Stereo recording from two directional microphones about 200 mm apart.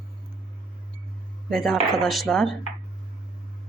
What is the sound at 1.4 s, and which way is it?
Speech, centre (ahead or behind).